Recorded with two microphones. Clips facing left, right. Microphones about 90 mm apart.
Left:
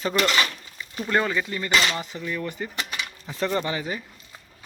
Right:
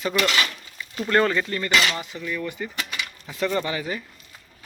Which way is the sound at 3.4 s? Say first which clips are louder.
Right 1 dB; 25° left (ahead or behind).